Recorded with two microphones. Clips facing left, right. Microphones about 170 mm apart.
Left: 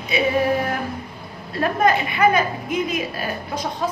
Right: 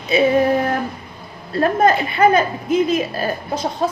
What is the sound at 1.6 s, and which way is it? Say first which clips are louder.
A woman's voice: right 3 dB; 30° right (ahead or behind).